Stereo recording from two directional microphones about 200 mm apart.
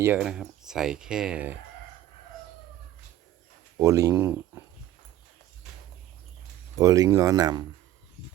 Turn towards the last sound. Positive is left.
turn(degrees=-20)  # may be behind; listen again after turning